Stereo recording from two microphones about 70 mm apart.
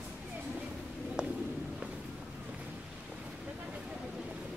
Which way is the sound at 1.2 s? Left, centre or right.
Centre.